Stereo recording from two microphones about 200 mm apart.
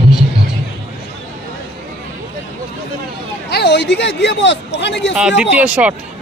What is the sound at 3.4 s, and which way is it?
Speech, 55° left (ahead or behind).